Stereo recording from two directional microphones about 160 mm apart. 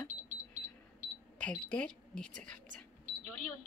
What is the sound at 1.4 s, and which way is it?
Speech, 5° left (ahead or behind).